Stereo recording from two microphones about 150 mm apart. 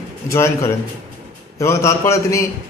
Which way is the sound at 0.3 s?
20° left (ahead or behind).